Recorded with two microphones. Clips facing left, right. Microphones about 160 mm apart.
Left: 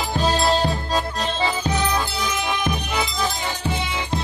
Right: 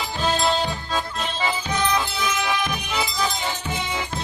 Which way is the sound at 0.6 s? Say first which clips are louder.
Left 4 dB; 35° left (ahead or behind).